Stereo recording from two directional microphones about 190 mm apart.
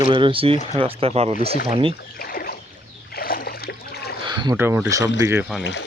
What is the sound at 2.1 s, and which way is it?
Rowboat, 50° left (ahead or behind).